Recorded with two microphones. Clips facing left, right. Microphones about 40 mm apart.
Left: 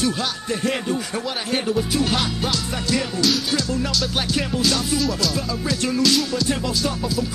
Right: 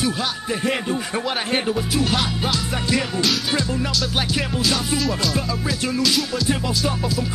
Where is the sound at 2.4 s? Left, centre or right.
Centre.